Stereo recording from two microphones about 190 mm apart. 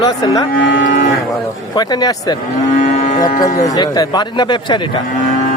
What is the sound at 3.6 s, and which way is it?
A man's voice, 20° left (ahead or behind).